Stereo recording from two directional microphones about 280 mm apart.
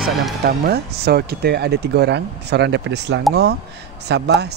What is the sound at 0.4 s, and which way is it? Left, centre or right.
A man's voice, right.